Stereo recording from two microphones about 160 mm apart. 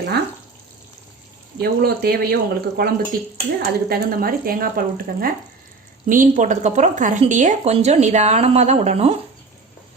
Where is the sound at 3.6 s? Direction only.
70° right (ahead or behind); by 9.2 s 40° right (ahead or behind).